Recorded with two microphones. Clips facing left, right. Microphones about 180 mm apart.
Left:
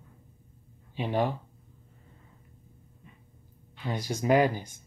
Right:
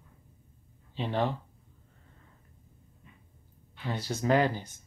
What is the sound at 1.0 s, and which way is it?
Speech, 15° left (ahead or behind).